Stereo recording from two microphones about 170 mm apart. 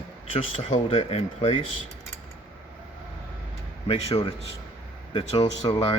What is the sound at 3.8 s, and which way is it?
Speech, 35° left (ahead or behind).